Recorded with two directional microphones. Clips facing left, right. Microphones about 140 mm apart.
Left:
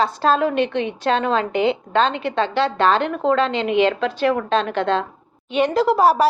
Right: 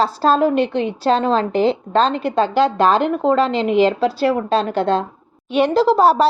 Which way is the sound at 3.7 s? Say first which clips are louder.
Right 3 dB; 35° right (ahead or behind).